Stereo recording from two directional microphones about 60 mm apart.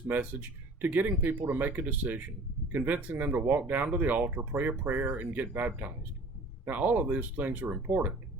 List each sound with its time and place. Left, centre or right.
0.1 s speech: right